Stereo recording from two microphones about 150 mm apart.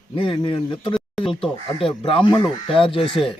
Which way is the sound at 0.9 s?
Centre (ahead or behind).